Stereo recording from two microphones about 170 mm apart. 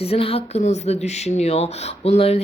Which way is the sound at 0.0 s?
35° left (ahead or behind).